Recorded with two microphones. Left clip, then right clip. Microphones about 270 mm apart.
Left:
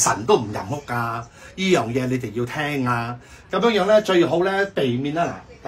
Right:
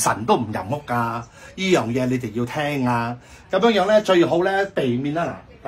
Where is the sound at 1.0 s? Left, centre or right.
Centre.